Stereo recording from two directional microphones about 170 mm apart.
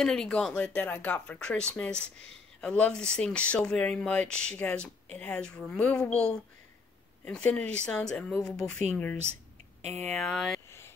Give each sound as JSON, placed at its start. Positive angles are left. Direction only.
{"t": 0.0, "sound": "speech", "side_deg": 5}
{"t": 9.8, "sound": "a sound", "side_deg": -40}
{"t": 10.0, "sound": "speech", "side_deg": 5}